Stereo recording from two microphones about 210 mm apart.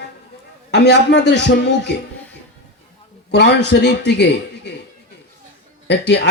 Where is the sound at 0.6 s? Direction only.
55° left (ahead or behind).